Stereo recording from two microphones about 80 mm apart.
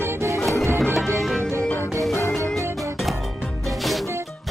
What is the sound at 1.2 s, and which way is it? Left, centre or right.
Music, centre.